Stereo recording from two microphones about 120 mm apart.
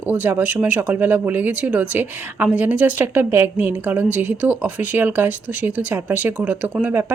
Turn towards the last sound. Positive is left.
turn(degrees=-15)  # may be behind; listen again after turning